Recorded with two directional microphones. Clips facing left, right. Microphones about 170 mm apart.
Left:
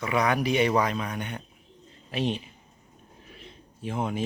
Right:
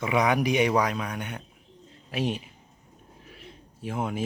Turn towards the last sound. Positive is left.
turn(degrees=-5)  # may be behind; listen again after turning